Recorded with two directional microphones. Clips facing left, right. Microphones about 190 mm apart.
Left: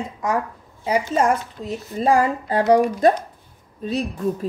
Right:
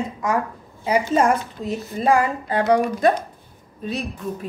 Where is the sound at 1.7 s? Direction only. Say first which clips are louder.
Even; 35° left (ahead or behind).